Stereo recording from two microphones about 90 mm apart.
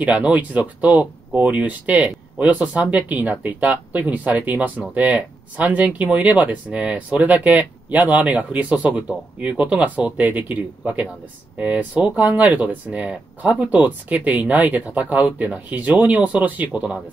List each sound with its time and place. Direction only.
0.0 s speech: 15° right (ahead or behind)